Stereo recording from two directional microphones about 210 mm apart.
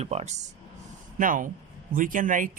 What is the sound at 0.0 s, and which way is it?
Speech, 30° right (ahead or behind).